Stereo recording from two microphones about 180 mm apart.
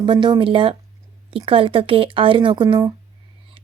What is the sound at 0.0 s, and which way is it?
Speech, 25° right (ahead or behind).